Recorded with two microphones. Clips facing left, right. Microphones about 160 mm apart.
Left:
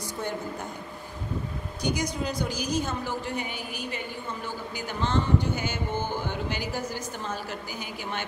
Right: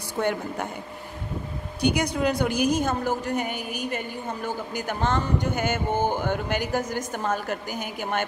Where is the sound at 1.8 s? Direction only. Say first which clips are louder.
Right 6 dB; 65° right (ahead or behind).